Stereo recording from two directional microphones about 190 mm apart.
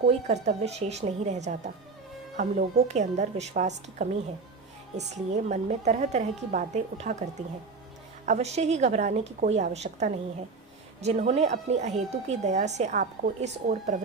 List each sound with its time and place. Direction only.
0.1 s a woman's voice: 35° right (ahead or behind)
8.3 s a woman's voice: 35° right (ahead or behind)